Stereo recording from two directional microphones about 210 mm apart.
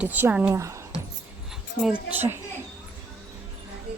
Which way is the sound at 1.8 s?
5° right (ahead or behind).